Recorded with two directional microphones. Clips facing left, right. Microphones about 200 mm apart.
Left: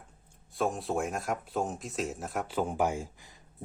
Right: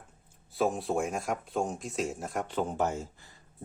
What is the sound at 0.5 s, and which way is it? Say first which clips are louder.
Speech: right 2 dB; centre (ahead or behind).